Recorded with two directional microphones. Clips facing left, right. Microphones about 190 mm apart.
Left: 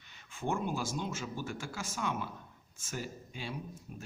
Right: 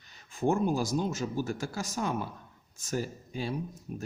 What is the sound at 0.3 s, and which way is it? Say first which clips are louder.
Speech: right 7 dB; 40° right (ahead or behind).